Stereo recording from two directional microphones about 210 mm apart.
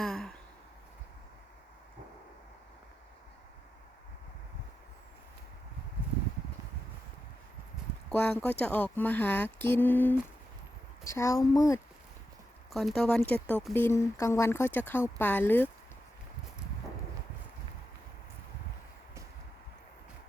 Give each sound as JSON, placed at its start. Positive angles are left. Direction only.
{"t": 0.0, "sound": "a sound", "side_deg": 0}
{"t": 8.1, "sound": "speech", "side_deg": 10}
{"t": 12.7, "sound": "speech", "side_deg": 0}